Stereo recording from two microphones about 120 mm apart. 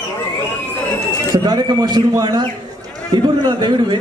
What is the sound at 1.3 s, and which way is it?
A man's voice, 35° right (ahead or behind).